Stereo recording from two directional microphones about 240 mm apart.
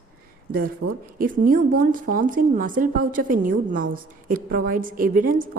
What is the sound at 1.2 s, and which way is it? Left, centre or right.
A woman's voice, right.